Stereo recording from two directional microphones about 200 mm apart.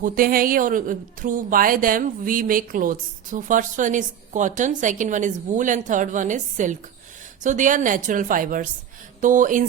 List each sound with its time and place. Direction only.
0.0 s a woman's voice: 45° right (ahead or behind)